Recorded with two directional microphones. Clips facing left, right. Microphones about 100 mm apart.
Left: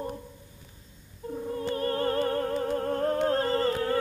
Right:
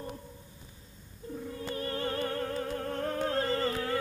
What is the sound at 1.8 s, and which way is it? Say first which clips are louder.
Music: left 5 dB; 40° left (ahead or behind).